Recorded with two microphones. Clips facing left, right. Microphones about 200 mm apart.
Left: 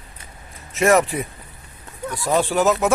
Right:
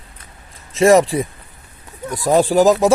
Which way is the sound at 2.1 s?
40° right (ahead or behind).